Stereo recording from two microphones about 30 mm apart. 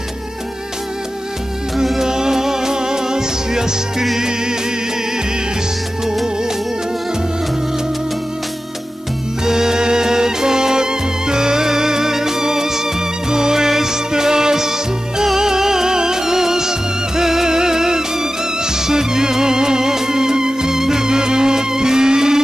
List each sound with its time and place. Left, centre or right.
2.0 s music: right
9.4 s music: centre